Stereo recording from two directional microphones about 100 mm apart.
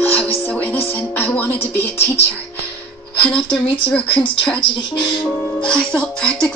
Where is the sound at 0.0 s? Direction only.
20° left (ahead or behind).